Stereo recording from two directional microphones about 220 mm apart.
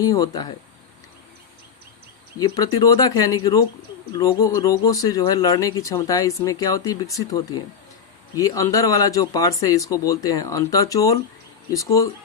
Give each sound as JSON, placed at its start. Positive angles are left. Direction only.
{"t": 0.0, "sound": "speech", "side_deg": 15}
{"t": 2.4, "sound": "speech", "side_deg": 15}